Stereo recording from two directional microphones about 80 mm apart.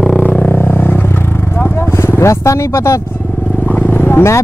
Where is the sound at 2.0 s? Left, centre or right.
Left.